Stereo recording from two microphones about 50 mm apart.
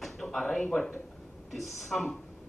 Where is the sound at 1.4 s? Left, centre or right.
Centre.